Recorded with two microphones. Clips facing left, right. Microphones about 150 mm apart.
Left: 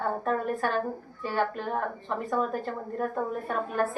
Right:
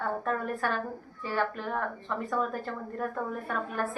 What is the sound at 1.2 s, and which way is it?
A woman's voice, 25° left (ahead or behind).